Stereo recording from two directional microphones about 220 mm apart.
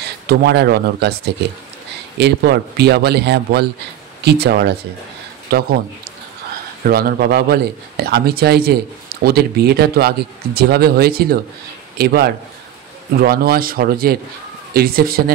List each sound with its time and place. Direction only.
0.3 s a man's voice: 50° right (ahead or behind)
6.8 s a man's voice: 40° right (ahead or behind)